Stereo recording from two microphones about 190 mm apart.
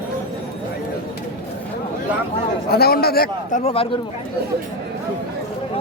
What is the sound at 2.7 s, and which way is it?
Speech, 55° left (ahead or behind).